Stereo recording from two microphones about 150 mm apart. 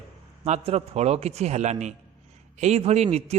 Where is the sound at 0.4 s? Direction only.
45° right (ahead or behind).